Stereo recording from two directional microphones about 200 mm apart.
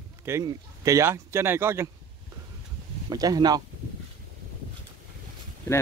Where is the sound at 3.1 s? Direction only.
20° right (ahead or behind).